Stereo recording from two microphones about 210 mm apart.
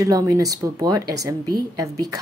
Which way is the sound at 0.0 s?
15° right (ahead or behind).